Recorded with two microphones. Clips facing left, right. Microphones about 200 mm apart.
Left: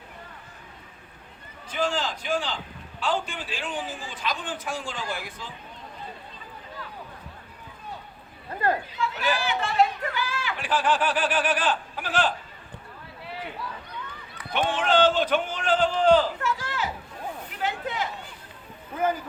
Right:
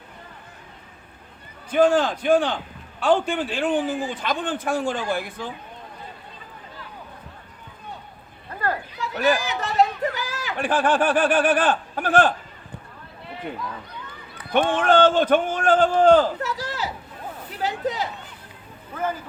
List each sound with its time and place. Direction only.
1.7 s a man's voice: 55° right (ahead or behind)
8.5 s children playing: 20° left (ahead or behind)
9.0 s speech: 45° right (ahead or behind)
14.5 s a man's voice: 50° right (ahead or behind)
17.6 s a sound: 35° right (ahead or behind)